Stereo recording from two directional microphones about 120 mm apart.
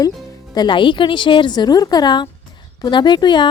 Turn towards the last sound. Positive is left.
turn(degrees=40)  # may be behind; listen again after turning